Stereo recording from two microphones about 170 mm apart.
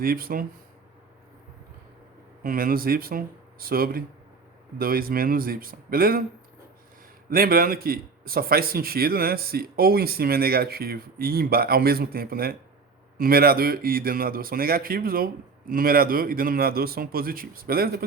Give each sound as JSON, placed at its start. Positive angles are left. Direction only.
{"t": 0.0, "sound": "speech", "side_deg": -60}
{"t": 2.4, "sound": "speech", "side_deg": -55}
{"t": 7.3, "sound": "speech", "side_deg": -60}